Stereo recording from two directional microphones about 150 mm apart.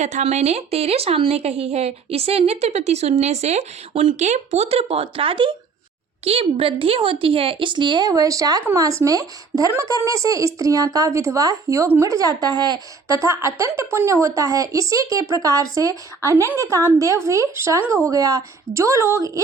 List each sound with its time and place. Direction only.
0.0 s a woman's voice: 55° right (ahead or behind); by 19.4 s 20° right (ahead or behind)